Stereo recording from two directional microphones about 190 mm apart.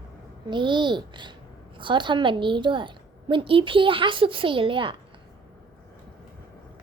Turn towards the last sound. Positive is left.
turn(degrees=-25)  # may be behind; listen again after turning